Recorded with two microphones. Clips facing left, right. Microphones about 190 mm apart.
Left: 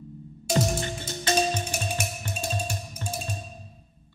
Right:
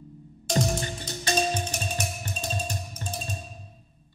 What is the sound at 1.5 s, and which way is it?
Music, 10° left (ahead or behind).